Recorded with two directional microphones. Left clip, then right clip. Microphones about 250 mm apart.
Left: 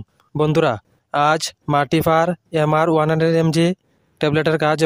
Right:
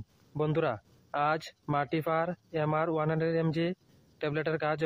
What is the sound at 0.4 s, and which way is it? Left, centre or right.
Speech, left.